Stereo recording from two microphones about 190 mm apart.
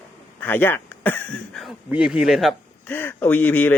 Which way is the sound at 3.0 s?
10° left (ahead or behind).